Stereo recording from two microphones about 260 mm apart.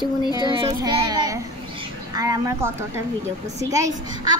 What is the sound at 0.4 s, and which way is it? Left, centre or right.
A child's voice, centre.